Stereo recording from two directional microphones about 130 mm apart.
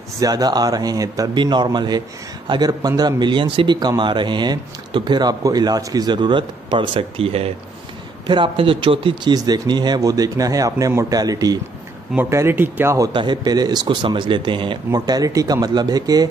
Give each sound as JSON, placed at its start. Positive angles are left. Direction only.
{"t": 0.2, "sound": "speech", "side_deg": -30}
{"t": 13.1, "sound": "speech", "side_deg": -35}